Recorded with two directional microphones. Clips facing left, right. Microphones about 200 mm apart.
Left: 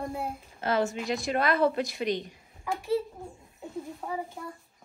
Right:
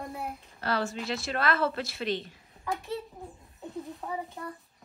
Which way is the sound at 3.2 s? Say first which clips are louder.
Left 1 dB; centre (ahead or behind).